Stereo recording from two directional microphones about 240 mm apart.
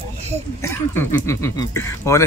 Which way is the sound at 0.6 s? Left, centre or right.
Centre.